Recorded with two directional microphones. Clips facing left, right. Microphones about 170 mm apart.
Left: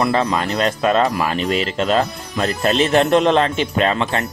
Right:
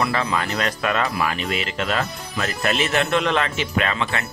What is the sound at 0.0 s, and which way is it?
Speech, 35° left (ahead or behind).